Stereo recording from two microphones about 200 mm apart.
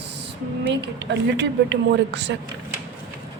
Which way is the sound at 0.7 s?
60° right (ahead or behind).